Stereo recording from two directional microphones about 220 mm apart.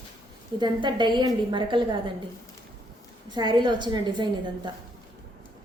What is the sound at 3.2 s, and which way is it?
A woman's voice, 20° right (ahead or behind).